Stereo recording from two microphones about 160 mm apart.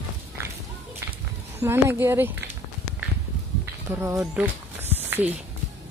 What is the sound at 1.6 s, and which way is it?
Speech, 15° right (ahead or behind).